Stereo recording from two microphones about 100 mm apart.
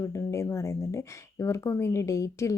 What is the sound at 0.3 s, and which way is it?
A woman's voice, 30° left (ahead or behind).